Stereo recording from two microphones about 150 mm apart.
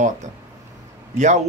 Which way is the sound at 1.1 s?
55° right (ahead or behind).